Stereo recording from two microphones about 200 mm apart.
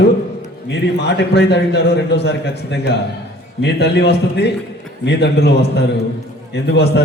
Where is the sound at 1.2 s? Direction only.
60° left (ahead or behind).